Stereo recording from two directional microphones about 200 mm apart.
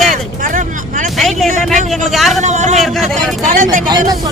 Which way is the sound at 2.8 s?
Centre (ahead or behind).